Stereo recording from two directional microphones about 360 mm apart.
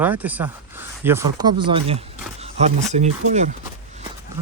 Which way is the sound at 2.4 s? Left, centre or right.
Centre.